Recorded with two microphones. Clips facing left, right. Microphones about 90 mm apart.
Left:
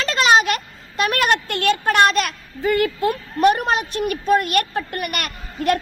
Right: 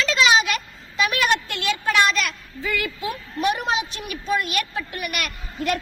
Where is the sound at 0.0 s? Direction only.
50° left (ahead or behind).